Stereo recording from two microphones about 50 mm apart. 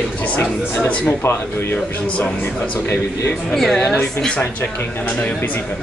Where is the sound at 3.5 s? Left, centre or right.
Centre.